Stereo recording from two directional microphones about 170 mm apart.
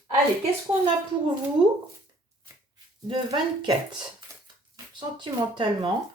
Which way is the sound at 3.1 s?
25° right (ahead or behind).